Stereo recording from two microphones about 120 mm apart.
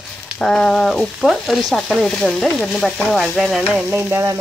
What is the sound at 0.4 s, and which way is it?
Frying, 5° left (ahead or behind).